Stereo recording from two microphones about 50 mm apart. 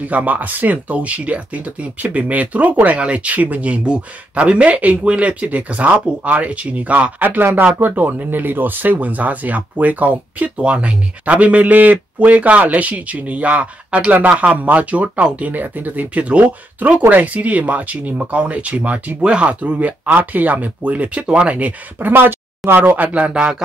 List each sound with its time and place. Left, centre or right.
0.1 s speech: right
7.6 s speech: right
22.0 s speech: right
23.1 s speech: right